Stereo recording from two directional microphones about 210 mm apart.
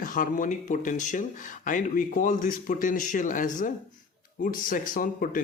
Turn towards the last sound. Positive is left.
turn(degrees=40)  # may be behind; listen again after turning